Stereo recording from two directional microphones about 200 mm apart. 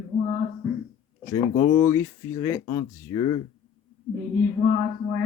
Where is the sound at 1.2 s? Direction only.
15° left (ahead or behind).